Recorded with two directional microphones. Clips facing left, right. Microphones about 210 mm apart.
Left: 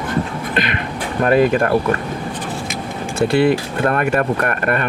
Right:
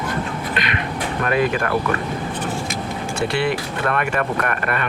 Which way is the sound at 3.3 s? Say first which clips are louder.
Left 10 dB; 40° left (ahead or behind).